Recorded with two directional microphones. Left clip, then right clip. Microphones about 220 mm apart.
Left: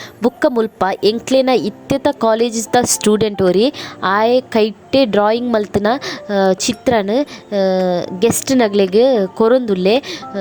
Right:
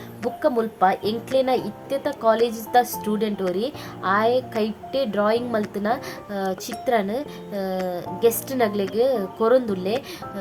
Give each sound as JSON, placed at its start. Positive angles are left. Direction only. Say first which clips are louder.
{"t": 0.3, "sound": "a woman's voice", "louder": "left 4 dB", "side_deg": 35}